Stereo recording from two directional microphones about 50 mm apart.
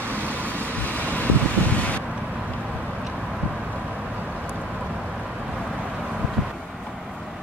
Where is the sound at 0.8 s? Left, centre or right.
Left.